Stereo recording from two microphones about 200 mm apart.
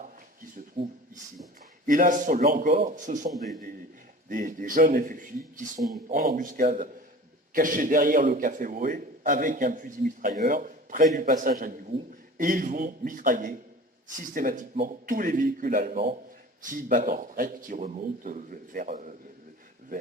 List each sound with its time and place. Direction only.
1.9 s a man's voice: 40° right (ahead or behind)